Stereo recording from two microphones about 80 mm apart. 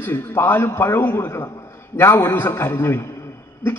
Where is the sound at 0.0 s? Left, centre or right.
Left.